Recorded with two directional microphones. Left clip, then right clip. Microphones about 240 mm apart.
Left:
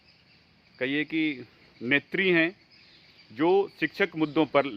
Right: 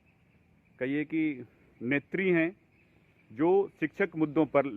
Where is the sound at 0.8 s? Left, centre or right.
Centre.